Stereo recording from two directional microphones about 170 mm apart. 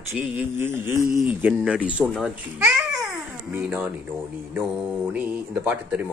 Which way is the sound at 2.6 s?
15° right (ahead or behind).